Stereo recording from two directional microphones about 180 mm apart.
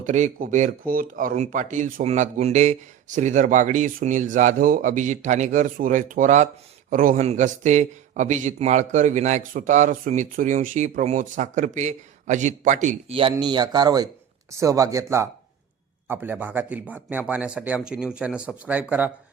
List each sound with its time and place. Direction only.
0.0 s speech: 45° right (ahead or behind); by 19.1 s 10° right (ahead or behind)